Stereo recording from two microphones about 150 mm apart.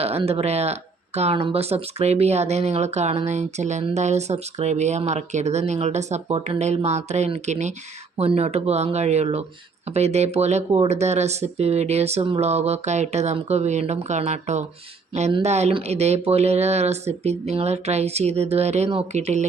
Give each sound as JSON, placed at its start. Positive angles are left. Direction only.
{"t": 0.0, "sound": "speech", "side_deg": -45}